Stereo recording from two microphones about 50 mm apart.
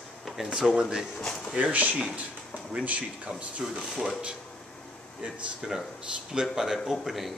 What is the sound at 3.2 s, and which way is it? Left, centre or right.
Speech, right.